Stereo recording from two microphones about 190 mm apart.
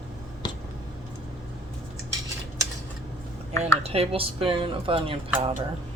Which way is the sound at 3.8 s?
30° right (ahead or behind).